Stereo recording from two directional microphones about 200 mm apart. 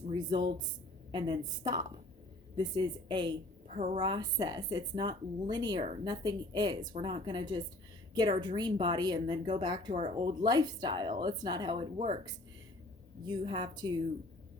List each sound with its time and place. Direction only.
0.1 s speech: 20° right (ahead or behind)
13.2 s speech: 25° right (ahead or behind)